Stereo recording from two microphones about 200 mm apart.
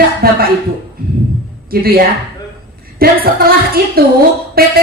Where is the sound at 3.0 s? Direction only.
50° right (ahead or behind).